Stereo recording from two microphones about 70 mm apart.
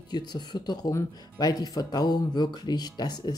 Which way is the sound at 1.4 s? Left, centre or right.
Left.